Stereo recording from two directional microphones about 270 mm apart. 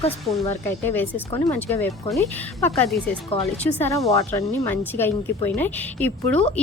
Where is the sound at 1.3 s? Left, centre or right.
Centre.